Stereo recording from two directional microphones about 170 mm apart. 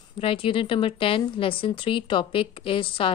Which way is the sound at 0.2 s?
35° left (ahead or behind).